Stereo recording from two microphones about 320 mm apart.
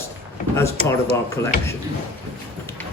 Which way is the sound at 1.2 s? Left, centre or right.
Centre.